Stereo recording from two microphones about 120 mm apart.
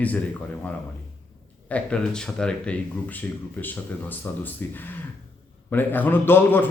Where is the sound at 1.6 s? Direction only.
10° left (ahead or behind).